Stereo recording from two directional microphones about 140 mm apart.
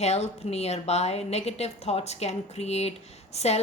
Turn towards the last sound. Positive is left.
turn(degrees=50)  # may be behind; listen again after turning